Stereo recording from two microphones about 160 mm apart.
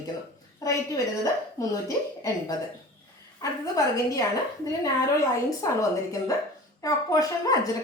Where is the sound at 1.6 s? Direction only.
20° left (ahead or behind).